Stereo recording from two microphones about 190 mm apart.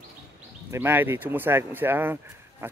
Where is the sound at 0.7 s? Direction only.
10° right (ahead or behind).